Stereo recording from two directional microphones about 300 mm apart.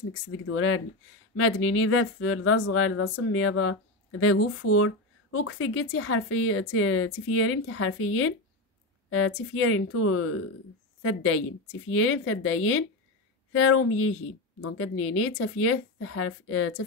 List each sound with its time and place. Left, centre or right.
0.1 s speech: left